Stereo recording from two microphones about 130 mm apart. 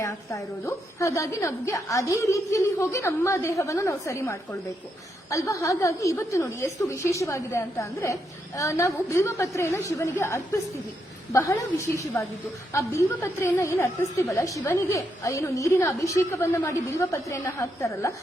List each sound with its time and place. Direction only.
0.0 s a woman's voice: 25° left (ahead or behind)